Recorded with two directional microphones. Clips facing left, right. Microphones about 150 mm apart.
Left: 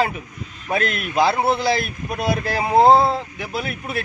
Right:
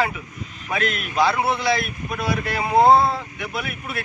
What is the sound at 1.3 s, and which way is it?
A man's voice, 30° left (ahead or behind).